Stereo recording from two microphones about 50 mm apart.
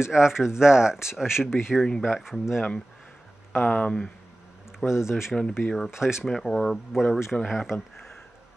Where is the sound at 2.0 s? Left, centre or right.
Centre.